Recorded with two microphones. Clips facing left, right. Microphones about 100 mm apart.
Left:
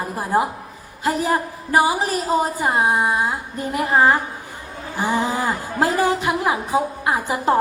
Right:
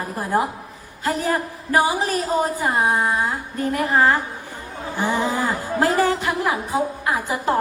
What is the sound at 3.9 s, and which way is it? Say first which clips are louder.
Speech: left 2 dB; 30° left (ahead or behind).